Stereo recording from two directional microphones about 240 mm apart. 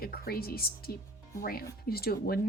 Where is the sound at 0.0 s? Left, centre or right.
Left.